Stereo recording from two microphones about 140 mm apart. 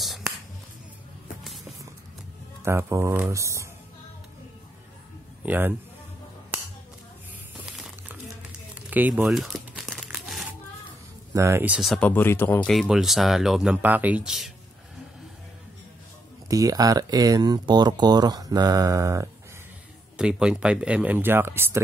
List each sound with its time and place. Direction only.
1.4 s music: centre (ahead or behind)
2.6 s speech: 20° right (ahead or behind)
5.4 s speech: 15° right (ahead or behind)
6.5 s a sound: 10° right (ahead or behind)
7.6 s crumpling: 5° right (ahead or behind)
11.3 s speech: 20° right (ahead or behind); by 12.1 s centre (ahead or behind)
12.1 s speech: 15° left (ahead or behind)
12.7 s speech: centre (ahead or behind)
16.4 s speech: 25° right (ahead or behind)
20.2 s speech: 5° right (ahead or behind)